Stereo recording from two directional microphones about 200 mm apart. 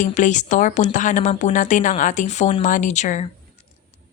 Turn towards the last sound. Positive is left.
turn(degrees=35)  # may be behind; listen again after turning